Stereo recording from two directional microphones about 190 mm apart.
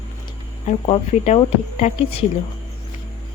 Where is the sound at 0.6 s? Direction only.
35° left (ahead or behind).